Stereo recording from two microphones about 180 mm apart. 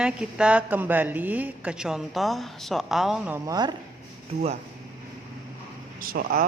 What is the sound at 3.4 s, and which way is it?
Speech, 25° right (ahead or behind).